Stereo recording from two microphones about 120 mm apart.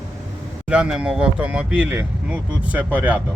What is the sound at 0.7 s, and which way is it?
Speech, 10° right (ahead or behind).